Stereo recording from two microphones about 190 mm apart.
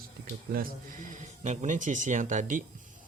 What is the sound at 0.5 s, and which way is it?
Speech, 45° right (ahead or behind).